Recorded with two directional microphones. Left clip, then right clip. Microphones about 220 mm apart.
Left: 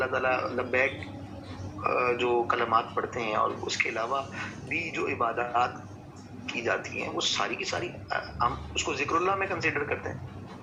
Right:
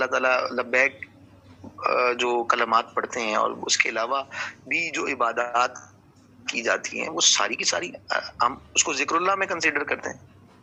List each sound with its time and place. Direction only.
0.0 s speech: 40° right (ahead or behind)